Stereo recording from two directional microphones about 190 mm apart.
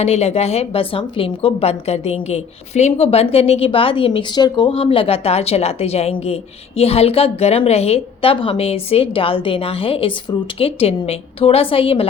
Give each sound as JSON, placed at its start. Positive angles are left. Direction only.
{"t": 0.0, "sound": "a woman's voice", "side_deg": 35}